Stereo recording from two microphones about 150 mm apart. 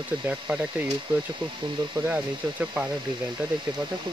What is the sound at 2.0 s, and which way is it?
Speech, 10° right (ahead or behind).